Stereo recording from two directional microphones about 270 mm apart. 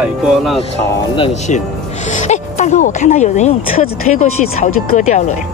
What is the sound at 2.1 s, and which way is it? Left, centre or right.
Speech, left.